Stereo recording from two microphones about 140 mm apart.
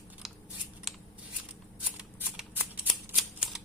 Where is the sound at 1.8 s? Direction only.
10° right (ahead or behind).